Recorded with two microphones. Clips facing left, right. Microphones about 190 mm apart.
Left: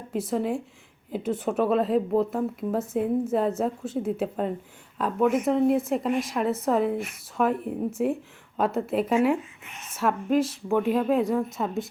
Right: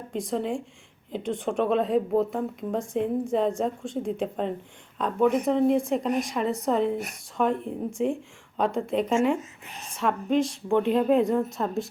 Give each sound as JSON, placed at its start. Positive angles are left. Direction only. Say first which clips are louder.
{"t": 0.1, "sound": "a woman's voice", "louder": "left 2 dB", "side_deg": 5}
{"t": 9.4, "sound": "a woman's voice", "louder": "right 2 dB", "side_deg": -35}
{"t": 9.9, "sound": "a woman's voice", "louder": "left 1 dB", "side_deg": 5}